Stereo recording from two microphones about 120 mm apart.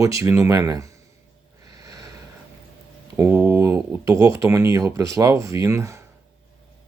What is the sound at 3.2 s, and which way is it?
Speech, 15° right (ahead or behind).